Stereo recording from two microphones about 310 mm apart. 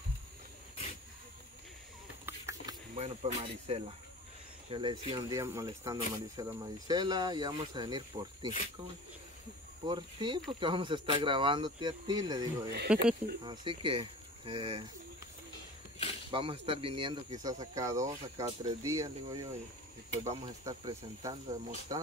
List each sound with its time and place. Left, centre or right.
2.2 s a sound: centre
2.9 s speech: centre
9.8 s speech: centre
13.4 s speech: centre
16.3 s speech: centre